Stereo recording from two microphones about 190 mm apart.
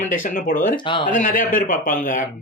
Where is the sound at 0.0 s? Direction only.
45° left (ahead or behind).